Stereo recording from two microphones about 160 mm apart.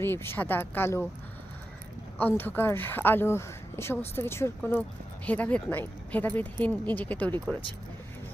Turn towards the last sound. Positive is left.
turn(degrees=10)  # may be behind; listen again after turning